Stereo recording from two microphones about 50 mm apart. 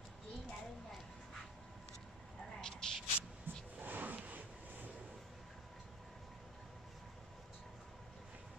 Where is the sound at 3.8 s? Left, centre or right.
Right.